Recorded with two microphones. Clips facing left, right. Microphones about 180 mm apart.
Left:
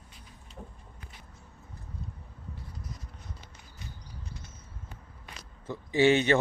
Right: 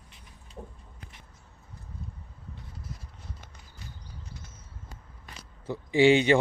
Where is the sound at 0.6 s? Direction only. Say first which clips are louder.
Right 3 dB; 25° right (ahead or behind).